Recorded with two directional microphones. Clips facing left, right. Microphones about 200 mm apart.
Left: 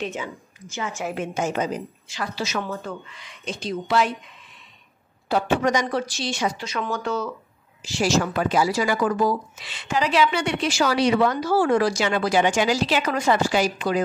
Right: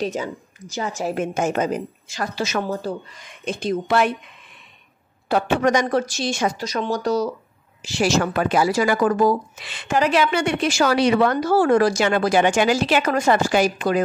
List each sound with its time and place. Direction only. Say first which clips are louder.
0.0 s speech: right 5 dB; 40° right (ahead or behind)
2.6 s speech: right 5 dB; 35° right (ahead or behind); by 4.2 s 55° right (ahead or behind)
5.3 s speech: right 3 dB; 55° right (ahead or behind); by 7.3 s 40° right (ahead or behind)
7.8 s speech: right 2 dB; 65° right (ahead or behind)